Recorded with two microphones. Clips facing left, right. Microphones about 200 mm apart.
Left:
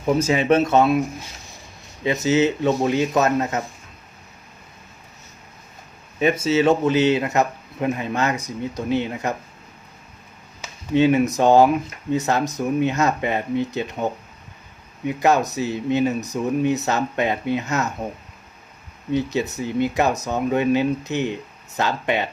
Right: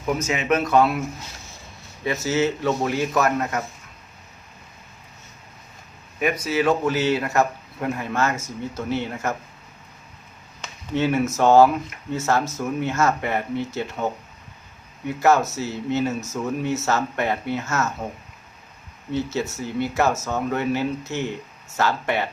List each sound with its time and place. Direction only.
0.0 s speech: 30° left (ahead or behind)
2.0 s speech: 20° left (ahead or behind)
6.1 s speech: 25° left (ahead or behind)
10.9 s speech: 15° left (ahead or behind)
19.1 s speech: 15° left (ahead or behind)